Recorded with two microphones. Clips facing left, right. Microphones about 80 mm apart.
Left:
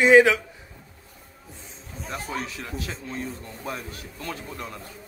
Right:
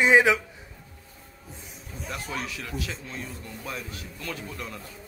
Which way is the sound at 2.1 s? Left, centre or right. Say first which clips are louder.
Left 2 dB; left.